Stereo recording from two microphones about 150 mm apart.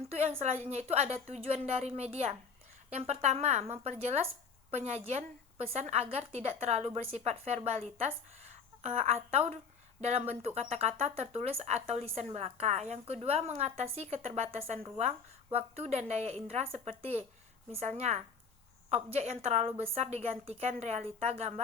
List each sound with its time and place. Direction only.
0.1 s a woman's voice: 40° right (ahead or behind)